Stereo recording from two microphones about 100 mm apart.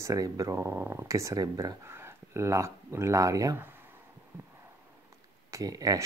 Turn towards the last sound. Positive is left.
turn(degrees=-35)  # may be behind; listen again after turning